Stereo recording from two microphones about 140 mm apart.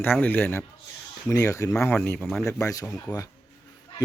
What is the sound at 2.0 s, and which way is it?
Speech, 5° left (ahead or behind).